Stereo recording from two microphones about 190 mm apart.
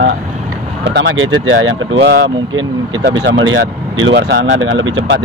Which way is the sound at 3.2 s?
75° right (ahead or behind).